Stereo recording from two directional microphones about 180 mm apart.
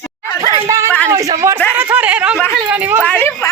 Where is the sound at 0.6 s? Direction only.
15° right (ahead or behind).